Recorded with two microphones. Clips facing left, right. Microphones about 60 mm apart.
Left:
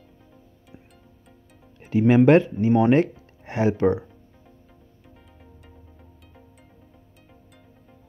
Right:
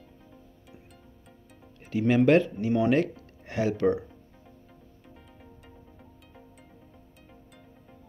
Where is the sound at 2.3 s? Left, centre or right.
Left.